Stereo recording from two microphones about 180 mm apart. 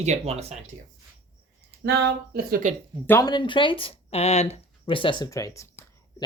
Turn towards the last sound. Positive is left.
turn(degrees=15)  # may be behind; listen again after turning